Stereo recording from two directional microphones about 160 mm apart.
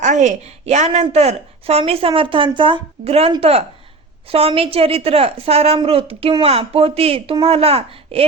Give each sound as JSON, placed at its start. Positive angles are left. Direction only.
{"t": 0.0, "sound": "a woman's voice", "side_deg": -50}